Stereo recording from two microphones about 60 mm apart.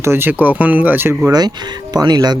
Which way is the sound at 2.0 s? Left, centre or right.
Right.